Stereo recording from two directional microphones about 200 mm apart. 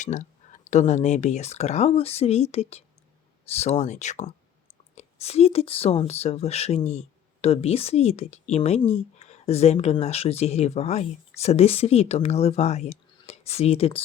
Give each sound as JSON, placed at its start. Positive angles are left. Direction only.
{"t": 0.0, "sound": "a woman's voice", "side_deg": 40}